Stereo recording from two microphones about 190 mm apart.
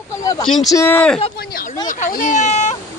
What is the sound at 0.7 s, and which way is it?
Speech, 15° left (ahead or behind).